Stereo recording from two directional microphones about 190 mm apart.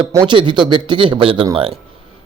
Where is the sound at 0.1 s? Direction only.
20° right (ahead or behind).